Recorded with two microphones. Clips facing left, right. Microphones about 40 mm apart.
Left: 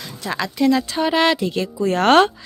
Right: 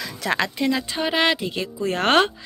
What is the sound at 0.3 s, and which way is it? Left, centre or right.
Speech, right.